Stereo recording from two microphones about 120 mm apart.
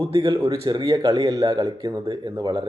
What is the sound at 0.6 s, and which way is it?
Speech, 35° right (ahead or behind).